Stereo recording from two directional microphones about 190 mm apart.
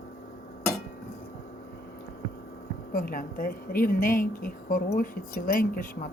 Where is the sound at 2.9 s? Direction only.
50° left (ahead or behind).